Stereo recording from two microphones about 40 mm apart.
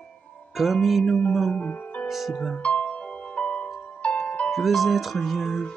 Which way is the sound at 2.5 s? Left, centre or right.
Left.